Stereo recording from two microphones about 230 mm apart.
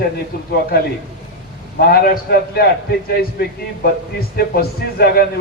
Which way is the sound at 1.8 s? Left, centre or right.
Left.